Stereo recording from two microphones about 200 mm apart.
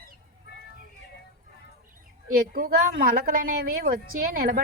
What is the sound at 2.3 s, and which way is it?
A woman's voice, 45° right (ahead or behind).